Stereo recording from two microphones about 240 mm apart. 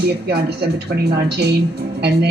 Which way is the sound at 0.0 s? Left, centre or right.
Right.